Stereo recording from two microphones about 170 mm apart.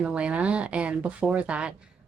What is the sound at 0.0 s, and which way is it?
Speech, 5° right (ahead or behind).